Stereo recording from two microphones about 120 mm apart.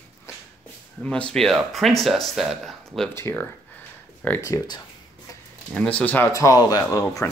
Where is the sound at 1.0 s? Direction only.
10° left (ahead or behind).